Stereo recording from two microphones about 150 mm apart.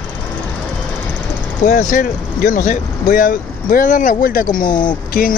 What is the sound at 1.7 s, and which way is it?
Speech, 60° left (ahead or behind).